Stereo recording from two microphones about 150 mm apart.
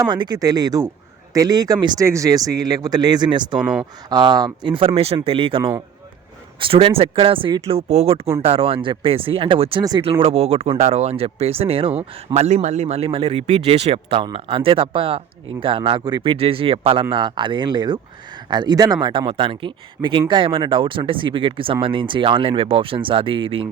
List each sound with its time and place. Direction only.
0.0 s speech: 30° right (ahead or behind)